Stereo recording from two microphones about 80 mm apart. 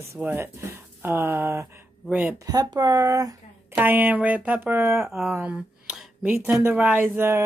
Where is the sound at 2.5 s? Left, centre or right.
Right.